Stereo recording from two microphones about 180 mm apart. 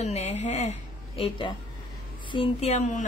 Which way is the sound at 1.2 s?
30° left (ahead or behind).